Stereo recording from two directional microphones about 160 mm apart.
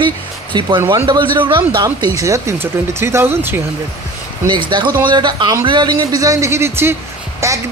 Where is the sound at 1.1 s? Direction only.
30° right (ahead or behind); by 3.6 s 15° right (ahead or behind).